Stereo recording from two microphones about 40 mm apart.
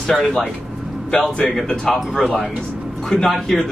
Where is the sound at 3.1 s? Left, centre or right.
Centre.